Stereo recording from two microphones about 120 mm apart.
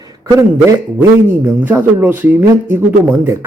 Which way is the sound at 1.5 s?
15° right (ahead or behind).